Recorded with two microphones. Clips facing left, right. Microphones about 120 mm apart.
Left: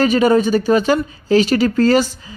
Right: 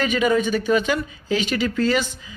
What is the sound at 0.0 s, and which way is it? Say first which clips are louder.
Speech: left 6 dB; 35° left (ahead or behind).